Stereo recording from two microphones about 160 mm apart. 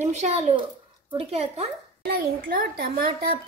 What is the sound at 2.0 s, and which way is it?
A woman's voice, 65° right (ahead or behind).